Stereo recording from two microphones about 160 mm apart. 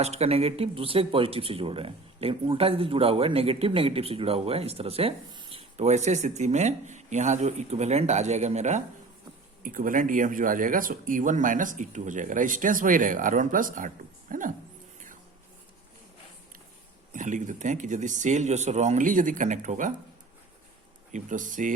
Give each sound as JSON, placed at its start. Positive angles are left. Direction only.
{"t": 0.0, "sound": "speech", "side_deg": -40}
{"t": 9.6, "sound": "speech", "side_deg": -60}
{"t": 17.1, "sound": "speech", "side_deg": -50}
{"t": 21.1, "sound": "speech", "side_deg": -55}